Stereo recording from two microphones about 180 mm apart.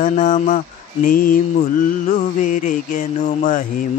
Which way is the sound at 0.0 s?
45° left (ahead or behind).